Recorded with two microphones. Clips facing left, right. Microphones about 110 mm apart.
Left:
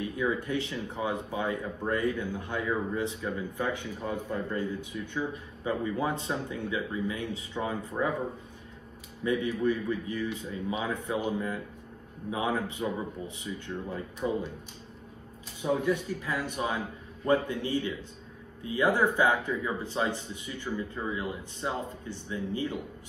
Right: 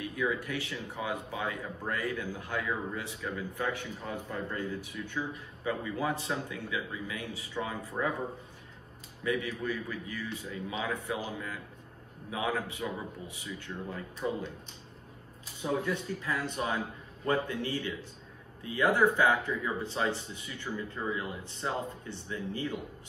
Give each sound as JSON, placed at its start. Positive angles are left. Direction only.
{"t": 0.0, "sound": "a man's voice", "side_deg": 25}
{"t": 8.0, "sound": "speech", "side_deg": 5}
{"t": 9.2, "sound": "a man's voice", "side_deg": 25}
{"t": 14.2, "sound": "speech", "side_deg": 10}
{"t": 15.6, "sound": "a man's voice", "side_deg": 15}